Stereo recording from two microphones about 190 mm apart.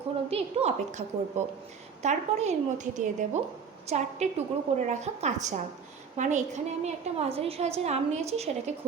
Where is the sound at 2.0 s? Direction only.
35° right (ahead or behind).